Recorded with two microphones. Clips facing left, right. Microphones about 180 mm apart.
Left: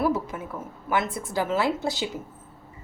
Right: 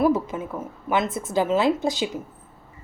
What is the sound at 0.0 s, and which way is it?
A woman's voice, 20° right (ahead or behind).